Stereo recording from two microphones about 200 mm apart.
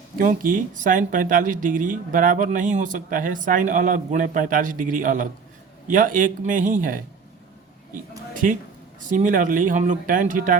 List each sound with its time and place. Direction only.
0.2 s speech: 40° right (ahead or behind)